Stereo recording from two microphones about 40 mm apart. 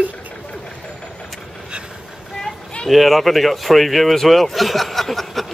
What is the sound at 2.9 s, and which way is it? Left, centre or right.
Speech, centre.